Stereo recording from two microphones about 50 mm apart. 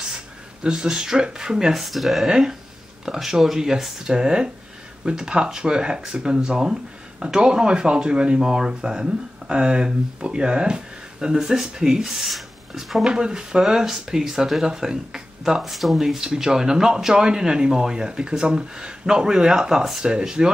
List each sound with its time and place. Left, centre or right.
0.7 s speech: centre
2.2 s speech: centre
13.0 s speech: centre
19.8 s speech: centre
20.1 s speech: centre